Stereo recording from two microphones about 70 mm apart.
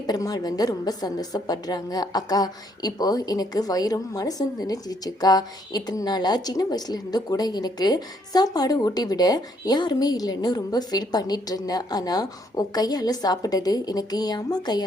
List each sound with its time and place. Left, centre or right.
0.1 s a woman's voice: left